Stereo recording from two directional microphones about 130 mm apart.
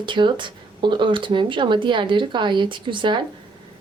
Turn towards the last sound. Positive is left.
turn(degrees=-40)  # may be behind; listen again after turning